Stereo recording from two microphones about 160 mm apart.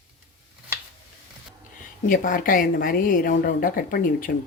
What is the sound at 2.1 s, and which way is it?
A woman's voice, 55° left (ahead or behind).